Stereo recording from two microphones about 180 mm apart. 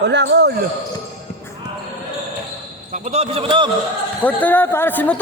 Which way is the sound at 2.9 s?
40° right (ahead or behind).